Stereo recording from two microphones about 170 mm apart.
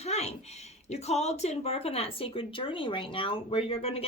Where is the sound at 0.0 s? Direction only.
40° left (ahead or behind).